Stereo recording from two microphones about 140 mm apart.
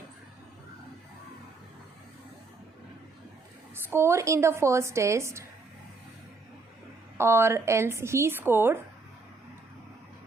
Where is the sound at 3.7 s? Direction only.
15° right (ahead or behind).